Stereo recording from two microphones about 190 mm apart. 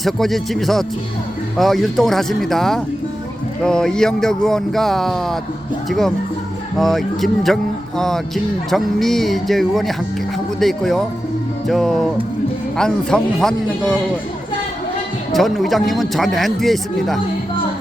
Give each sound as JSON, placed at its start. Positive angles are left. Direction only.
{"t": 0.0, "sound": "a man's voice", "side_deg": 0}
{"t": 15.3, "sound": "a man's voice", "side_deg": 0}